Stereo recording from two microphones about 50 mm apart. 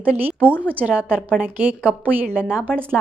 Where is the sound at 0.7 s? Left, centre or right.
Right.